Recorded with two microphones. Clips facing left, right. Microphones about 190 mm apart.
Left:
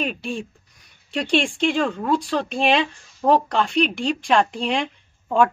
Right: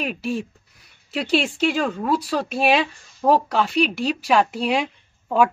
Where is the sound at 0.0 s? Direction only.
5° right (ahead or behind).